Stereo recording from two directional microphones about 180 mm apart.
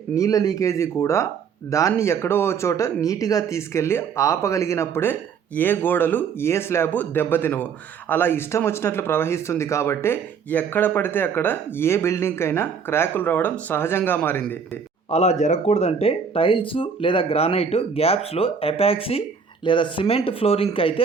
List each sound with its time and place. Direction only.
0.2 s speech: 20° left (ahead or behind)
15.1 s speech: 35° left (ahead or behind)